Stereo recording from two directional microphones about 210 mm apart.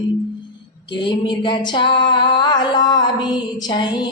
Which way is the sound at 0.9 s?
20° left (ahead or behind).